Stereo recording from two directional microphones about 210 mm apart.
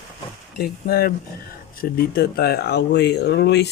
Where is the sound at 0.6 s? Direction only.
45° left (ahead or behind).